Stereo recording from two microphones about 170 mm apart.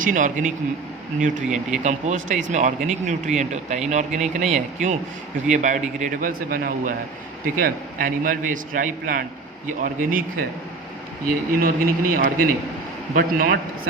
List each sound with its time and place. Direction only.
0.0 s speech: 50° right (ahead or behind)
1.5 s speech: 5° right (ahead or behind)
1.8 s speech: 45° right (ahead or behind)